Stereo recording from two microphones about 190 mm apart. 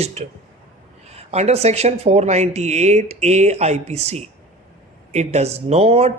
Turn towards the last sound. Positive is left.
turn(degrees=-35)  # may be behind; listen again after turning